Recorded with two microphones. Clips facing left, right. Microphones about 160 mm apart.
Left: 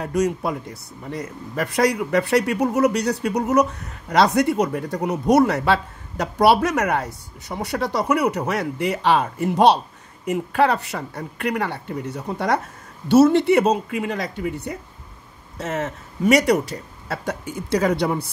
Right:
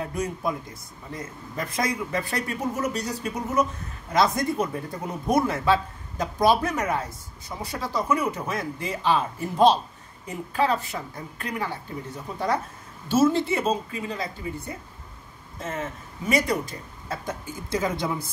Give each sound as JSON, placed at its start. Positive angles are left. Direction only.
{"t": 0.0, "sound": "a man's voice", "side_deg": 80}